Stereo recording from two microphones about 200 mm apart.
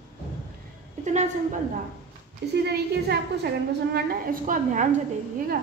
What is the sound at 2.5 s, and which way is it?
A woman's voice, 55° right (ahead or behind).